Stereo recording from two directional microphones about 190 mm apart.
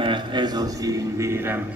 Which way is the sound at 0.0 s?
25° right (ahead or behind).